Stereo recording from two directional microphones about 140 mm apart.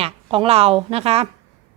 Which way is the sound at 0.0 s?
40° right (ahead or behind).